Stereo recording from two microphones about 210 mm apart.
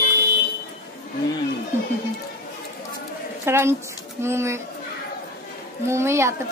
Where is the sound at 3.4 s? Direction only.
10° right (ahead or behind).